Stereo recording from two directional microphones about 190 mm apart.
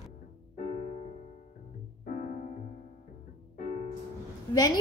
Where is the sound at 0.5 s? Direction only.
40° left (ahead or behind).